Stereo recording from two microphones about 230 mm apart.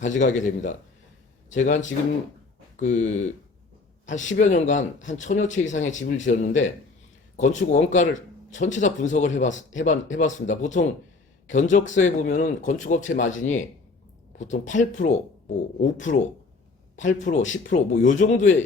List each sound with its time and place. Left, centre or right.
0.0 s speech: left
17.0 s speech: left